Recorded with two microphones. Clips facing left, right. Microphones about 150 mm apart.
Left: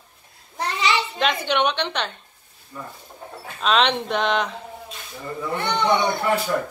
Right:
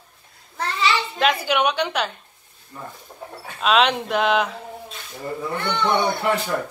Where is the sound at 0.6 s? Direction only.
15° left (ahead or behind).